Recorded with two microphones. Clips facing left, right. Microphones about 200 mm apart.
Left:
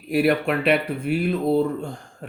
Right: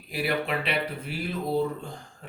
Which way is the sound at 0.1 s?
55° left (ahead or behind).